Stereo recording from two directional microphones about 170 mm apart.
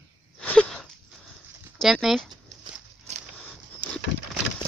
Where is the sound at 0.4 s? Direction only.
5° left (ahead or behind).